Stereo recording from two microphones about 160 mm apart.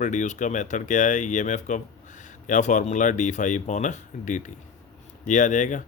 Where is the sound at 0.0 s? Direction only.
50° left (ahead or behind).